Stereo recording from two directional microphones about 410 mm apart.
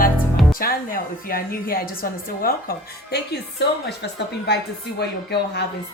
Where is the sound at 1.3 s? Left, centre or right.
Left.